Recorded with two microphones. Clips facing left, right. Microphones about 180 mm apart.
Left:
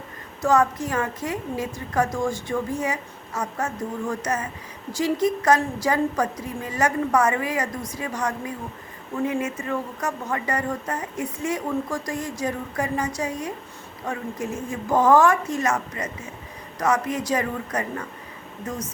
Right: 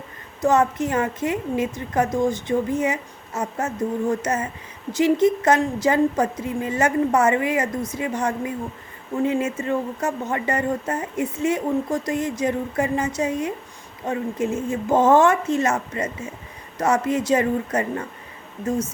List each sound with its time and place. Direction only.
0.4 s speech: 20° right (ahead or behind)